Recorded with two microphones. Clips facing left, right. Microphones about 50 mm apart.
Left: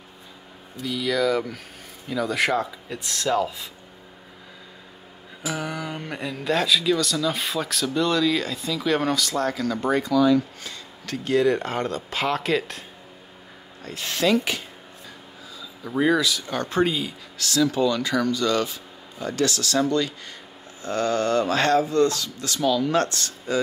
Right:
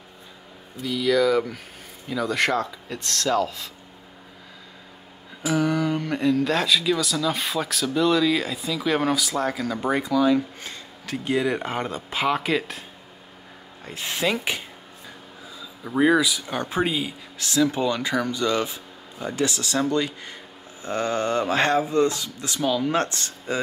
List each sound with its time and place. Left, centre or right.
0.7 s speech: centre
5.5 s speech: centre
13.8 s speech: centre
15.8 s speech: centre